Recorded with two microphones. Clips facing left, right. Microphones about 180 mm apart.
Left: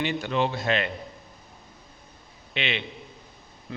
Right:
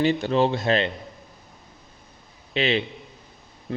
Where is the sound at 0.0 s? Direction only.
35° right (ahead or behind).